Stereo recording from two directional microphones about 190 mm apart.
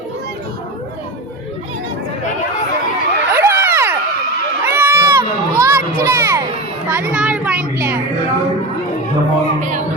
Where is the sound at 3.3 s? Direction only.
10° right (ahead or behind).